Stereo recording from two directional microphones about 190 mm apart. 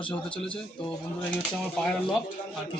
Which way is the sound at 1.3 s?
5° left (ahead or behind).